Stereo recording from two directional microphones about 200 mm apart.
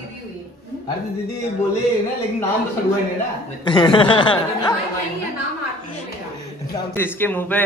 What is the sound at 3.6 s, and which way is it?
Speech, 20° left (ahead or behind).